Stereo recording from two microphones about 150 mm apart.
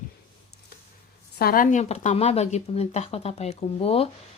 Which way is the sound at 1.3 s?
80° left.